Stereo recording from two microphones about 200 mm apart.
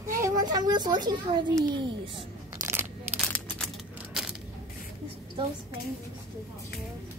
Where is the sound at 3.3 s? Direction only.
5° left (ahead or behind).